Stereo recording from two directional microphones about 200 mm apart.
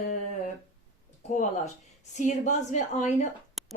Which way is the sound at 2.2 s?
35° left (ahead or behind).